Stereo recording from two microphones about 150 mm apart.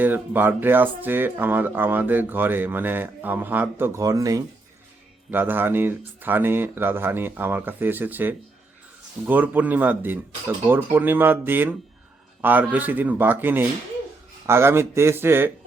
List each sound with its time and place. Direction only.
0.0 s speech: 10° right (ahead or behind)